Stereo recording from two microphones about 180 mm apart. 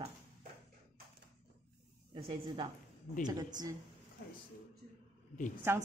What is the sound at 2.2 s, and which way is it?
Speech, 30° right (ahead or behind).